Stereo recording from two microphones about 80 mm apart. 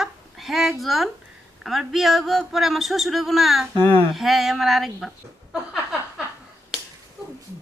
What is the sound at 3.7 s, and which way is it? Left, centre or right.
Speech, left.